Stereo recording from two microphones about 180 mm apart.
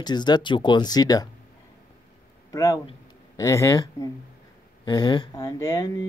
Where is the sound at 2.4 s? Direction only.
20° left (ahead or behind).